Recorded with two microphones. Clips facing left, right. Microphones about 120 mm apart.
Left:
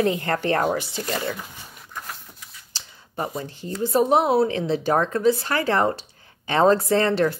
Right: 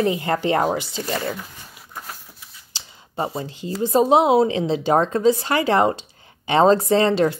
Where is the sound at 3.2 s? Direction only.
30° right (ahead or behind).